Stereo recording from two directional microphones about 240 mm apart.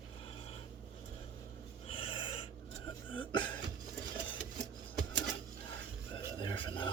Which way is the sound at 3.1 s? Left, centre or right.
Centre.